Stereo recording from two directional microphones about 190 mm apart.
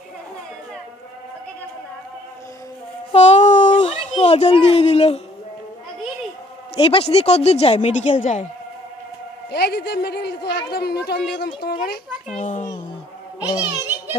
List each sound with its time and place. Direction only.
3.1 s a sound: 35° left (ahead or behind)
6.7 s speech: 30° left (ahead or behind)
9.5 s speech: 60° left (ahead or behind)
12.3 s speech: 40° left (ahead or behind)